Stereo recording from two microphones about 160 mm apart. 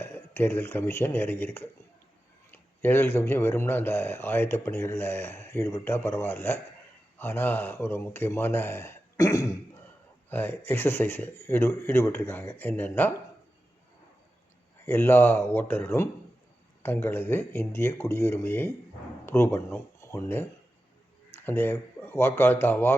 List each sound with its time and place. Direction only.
0.0 s speech: 15° left (ahead or behind)
14.8 s speech: 15° left (ahead or behind)